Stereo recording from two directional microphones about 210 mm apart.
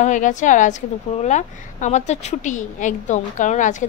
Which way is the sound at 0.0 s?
35° left (ahead or behind).